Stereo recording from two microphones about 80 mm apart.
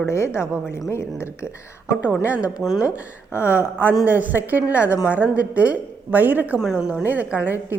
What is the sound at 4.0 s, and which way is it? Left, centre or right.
Speech, right.